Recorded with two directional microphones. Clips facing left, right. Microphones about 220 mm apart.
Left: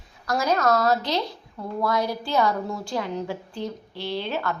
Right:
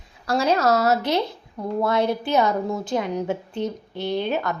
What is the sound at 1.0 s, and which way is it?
Speech, 60° right (ahead or behind).